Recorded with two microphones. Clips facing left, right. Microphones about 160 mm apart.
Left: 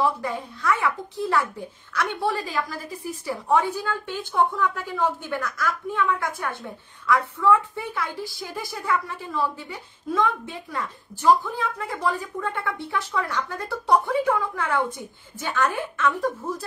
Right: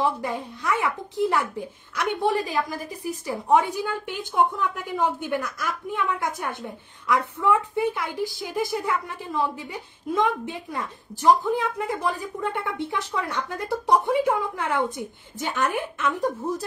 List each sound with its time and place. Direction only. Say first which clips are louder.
0.0 s a woman's voice: left 1 dB; 15° right (ahead or behind)